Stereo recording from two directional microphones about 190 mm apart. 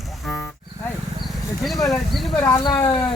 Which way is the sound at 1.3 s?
Centre (ahead or behind).